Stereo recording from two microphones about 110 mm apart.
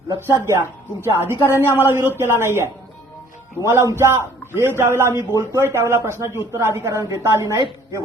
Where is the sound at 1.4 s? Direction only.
20° left (ahead or behind).